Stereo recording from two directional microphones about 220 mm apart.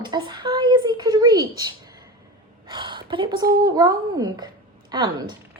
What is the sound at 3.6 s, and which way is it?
A woman's voice, 15° right (ahead or behind).